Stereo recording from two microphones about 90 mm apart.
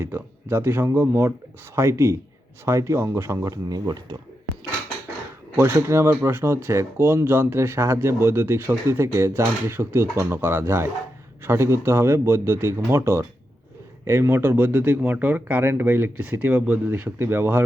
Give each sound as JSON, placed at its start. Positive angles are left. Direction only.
{"t": 0.0, "sound": "speech", "side_deg": -25}
{"t": 3.8, "sound": "speech", "side_deg": -50}
{"t": 5.5, "sound": "speech", "side_deg": -30}